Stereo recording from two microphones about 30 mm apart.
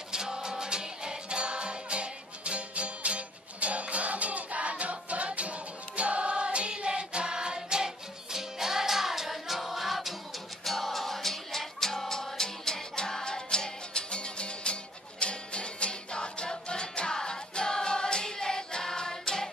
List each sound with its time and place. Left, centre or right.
0.1 s music: right; by 19.5 s centre